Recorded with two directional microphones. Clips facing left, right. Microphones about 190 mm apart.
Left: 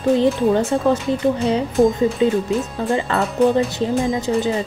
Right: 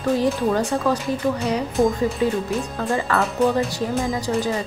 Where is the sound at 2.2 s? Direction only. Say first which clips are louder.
Left 4 dB; 20° left (ahead or behind).